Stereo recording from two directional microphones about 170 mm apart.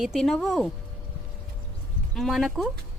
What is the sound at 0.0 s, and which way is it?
Speech, centre (ahead or behind).